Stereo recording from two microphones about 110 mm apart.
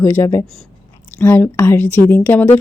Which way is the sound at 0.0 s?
25° left (ahead or behind).